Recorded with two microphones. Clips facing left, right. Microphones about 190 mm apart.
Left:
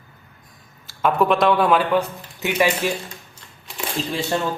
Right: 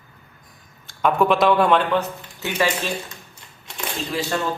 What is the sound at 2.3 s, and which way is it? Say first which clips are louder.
Speech: left 3 dB; 15° left (ahead or behind).